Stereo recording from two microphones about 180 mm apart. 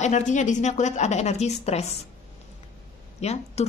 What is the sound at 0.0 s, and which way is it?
A woman's voice, 40° left (ahead or behind).